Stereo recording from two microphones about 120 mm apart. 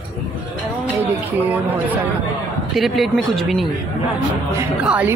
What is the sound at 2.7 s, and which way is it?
Speech, centre (ahead or behind).